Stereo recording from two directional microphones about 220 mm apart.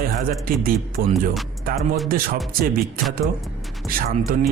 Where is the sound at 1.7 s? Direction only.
Centre (ahead or behind).